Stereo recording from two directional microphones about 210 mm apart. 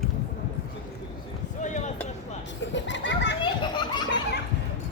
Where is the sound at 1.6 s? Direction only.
35° left (ahead or behind).